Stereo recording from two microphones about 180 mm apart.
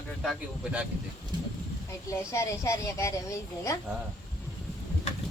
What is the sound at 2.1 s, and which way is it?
Speech, 15° left (ahead or behind).